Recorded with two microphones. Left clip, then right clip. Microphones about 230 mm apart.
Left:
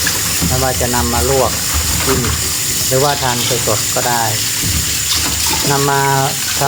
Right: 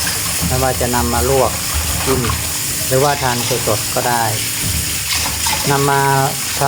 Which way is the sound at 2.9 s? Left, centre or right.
Centre.